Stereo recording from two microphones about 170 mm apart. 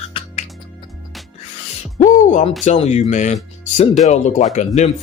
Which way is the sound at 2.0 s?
45° left (ahead or behind).